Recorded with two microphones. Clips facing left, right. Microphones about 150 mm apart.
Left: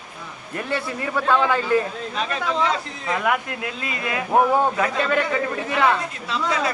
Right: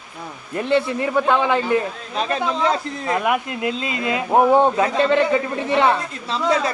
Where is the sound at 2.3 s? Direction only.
40° right (ahead or behind).